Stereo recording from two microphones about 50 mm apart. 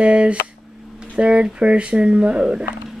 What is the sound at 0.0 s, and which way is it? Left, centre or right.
Speech, right.